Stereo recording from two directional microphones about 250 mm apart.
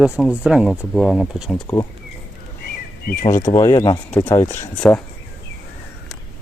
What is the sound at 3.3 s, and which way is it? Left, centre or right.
Speech, centre.